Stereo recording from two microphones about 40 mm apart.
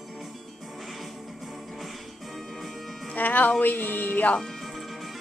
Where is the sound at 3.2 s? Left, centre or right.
Left.